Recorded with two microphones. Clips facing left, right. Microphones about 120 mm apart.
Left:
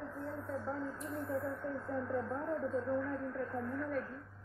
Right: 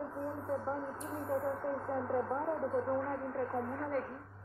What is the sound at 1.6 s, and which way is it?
Speech, 45° right (ahead or behind).